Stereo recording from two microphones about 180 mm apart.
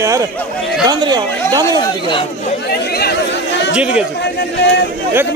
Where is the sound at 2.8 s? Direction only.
60° left (ahead or behind); by 3.8 s 80° left.